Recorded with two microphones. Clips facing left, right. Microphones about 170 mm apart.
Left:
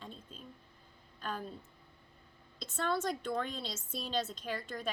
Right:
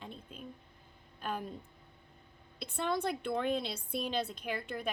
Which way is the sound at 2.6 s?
15° right (ahead or behind).